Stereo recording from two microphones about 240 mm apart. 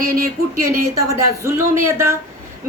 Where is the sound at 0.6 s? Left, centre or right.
Right.